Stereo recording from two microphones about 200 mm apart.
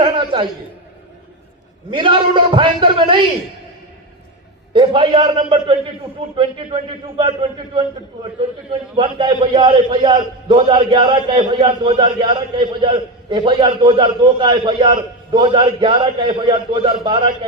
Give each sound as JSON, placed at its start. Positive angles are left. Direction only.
{"t": 0.0, "sound": "a sound", "side_deg": -25}
{"t": 1.9, "sound": "a man's voice", "side_deg": -25}
{"t": 4.7, "sound": "a man's voice", "side_deg": -25}